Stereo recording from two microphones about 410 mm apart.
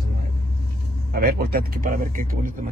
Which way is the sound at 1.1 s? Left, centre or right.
Right.